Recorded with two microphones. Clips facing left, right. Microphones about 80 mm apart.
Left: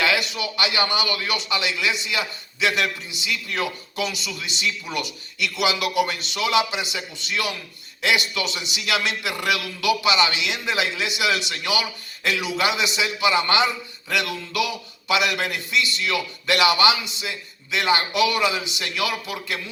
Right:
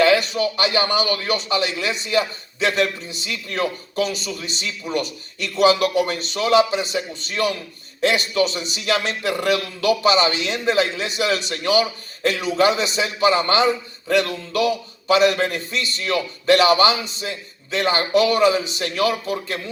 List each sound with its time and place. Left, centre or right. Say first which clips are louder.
0.0 s a man's voice: right 7 dB; right